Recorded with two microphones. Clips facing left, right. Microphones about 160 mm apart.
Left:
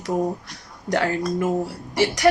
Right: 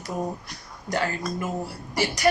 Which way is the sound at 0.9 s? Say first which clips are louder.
Left 5 dB; 80° left.